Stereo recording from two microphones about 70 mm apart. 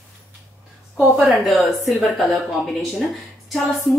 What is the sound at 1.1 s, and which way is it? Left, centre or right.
A woman's voice, centre.